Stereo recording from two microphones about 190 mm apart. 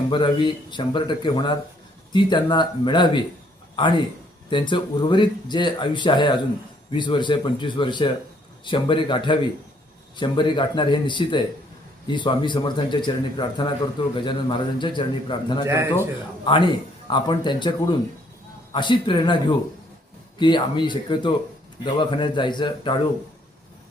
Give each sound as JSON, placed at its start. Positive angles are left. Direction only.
{"t": 0.1, "sound": "a man's voice", "side_deg": 25}